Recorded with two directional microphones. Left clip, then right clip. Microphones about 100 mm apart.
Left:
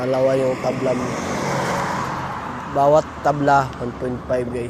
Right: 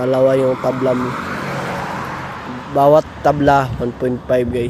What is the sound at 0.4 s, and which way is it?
Speech, 25° right (ahead or behind).